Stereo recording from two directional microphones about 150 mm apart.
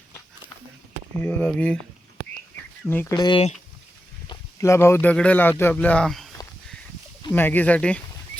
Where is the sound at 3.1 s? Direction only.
30° left (ahead or behind).